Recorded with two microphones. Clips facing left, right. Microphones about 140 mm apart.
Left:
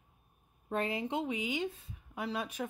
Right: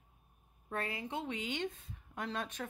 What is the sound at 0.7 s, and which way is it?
A woman's voice, 20° left (ahead or behind).